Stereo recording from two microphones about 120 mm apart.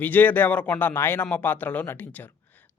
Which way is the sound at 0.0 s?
15° left (ahead or behind).